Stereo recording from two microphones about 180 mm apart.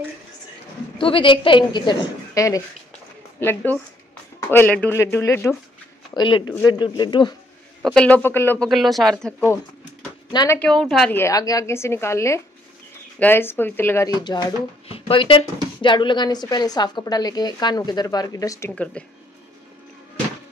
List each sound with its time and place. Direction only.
0.9 s speech: 30° left (ahead or behind)
6.1 s speech: 25° left (ahead or behind)
7.8 s speech: 5° left (ahead or behind)
8.6 s speech: centre (ahead or behind)
10.3 s speech: 20° left (ahead or behind)
10.6 s speech: 5° left (ahead or behind)
11.1 s speech: 15° left (ahead or behind)